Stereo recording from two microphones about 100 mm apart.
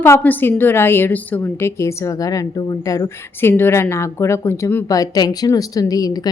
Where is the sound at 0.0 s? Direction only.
20° left (ahead or behind).